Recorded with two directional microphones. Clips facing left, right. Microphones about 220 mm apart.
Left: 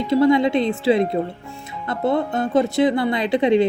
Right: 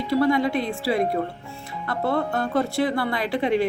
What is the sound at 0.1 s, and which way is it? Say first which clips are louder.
Speech: left 5 dB; 20° left (ahead or behind).